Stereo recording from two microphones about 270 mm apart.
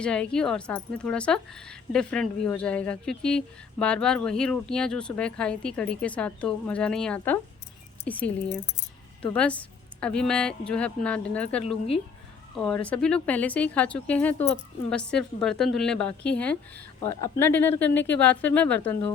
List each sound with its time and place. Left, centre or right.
0.0 s speech: centre
9.3 s speech: centre